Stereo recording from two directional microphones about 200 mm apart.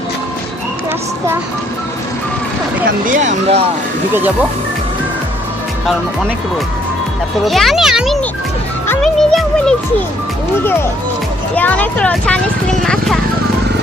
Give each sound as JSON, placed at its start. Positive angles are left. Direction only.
{"t": 3.1, "sound": "speech", "side_deg": -35}
{"t": 7.4, "sound": "a child's voice", "side_deg": 0}